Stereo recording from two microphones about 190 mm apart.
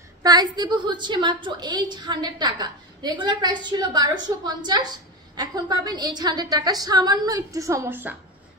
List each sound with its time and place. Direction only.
0.2 s a woman's voice: 20° right (ahead or behind)